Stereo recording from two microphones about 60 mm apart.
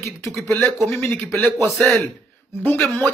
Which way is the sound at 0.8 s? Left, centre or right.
Left.